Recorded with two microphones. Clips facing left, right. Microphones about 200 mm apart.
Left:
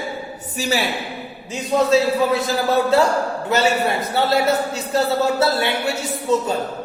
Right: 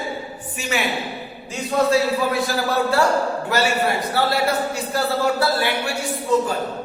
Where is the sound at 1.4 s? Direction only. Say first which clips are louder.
Left 1 dB; 20° left (ahead or behind).